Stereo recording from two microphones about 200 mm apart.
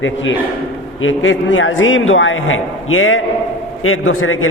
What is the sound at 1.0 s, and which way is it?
A man's voice, 70° left (ahead or behind).